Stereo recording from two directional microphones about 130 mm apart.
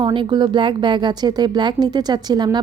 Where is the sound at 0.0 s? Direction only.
40° right (ahead or behind).